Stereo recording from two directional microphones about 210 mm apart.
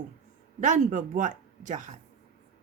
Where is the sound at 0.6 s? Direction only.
35° right (ahead or behind).